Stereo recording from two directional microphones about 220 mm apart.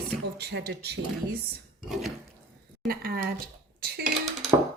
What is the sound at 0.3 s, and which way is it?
Speech, 45° right (ahead or behind).